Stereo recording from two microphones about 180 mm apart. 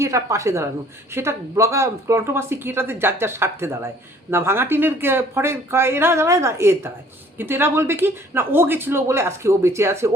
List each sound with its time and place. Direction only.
0.0 s speech: 15° right (ahead or behind)